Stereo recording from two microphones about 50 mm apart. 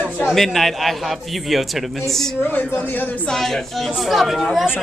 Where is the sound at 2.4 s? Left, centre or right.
Left.